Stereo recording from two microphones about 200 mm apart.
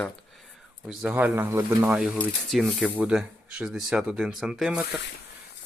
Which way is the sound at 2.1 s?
Centre (ahead or behind).